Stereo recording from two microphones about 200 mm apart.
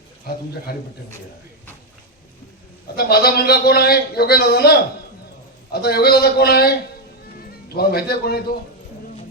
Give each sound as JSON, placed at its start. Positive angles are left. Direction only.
{"t": 0.3, "sound": "speech", "side_deg": 50}
{"t": 2.9, "sound": "speech", "side_deg": 50}